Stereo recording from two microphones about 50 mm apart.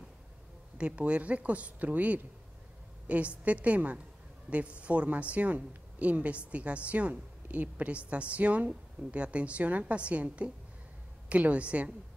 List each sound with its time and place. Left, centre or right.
0.7 s speech: right